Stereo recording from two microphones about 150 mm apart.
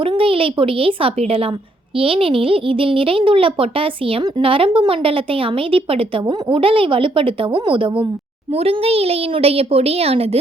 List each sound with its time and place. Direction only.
0.0 s speech: 35° right (ahead or behind)